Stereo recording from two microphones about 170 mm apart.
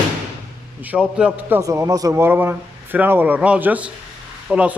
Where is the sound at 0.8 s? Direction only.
10° right (ahead or behind).